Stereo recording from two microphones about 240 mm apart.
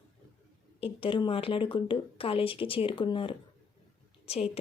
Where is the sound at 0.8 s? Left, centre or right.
Left.